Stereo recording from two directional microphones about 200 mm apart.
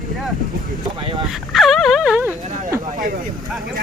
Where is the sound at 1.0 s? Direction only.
25° right (ahead or behind).